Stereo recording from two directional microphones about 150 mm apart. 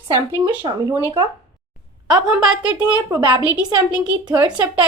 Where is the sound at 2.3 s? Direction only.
5° right (ahead or behind).